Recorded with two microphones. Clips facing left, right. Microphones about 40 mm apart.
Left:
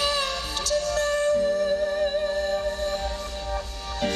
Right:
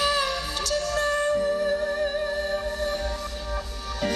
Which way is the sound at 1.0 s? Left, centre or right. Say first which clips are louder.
Even; right.